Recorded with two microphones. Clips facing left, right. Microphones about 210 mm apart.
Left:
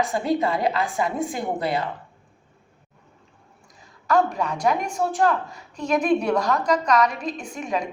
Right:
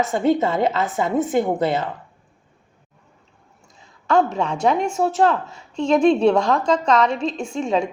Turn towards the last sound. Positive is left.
turn(degrees=-25)  # may be behind; listen again after turning